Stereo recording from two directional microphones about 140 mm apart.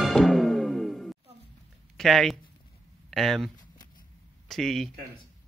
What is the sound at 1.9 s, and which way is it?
Speech, centre (ahead or behind).